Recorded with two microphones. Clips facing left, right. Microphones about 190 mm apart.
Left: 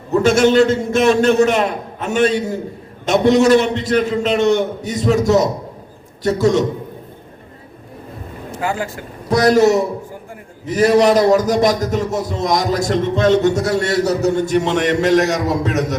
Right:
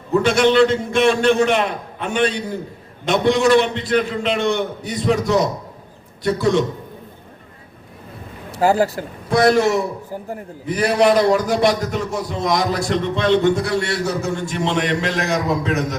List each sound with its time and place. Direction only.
0.1 s a man's voice: 45° left (ahead or behind)
8.5 s speech: 35° right (ahead or behind)
9.3 s a man's voice: 40° left (ahead or behind)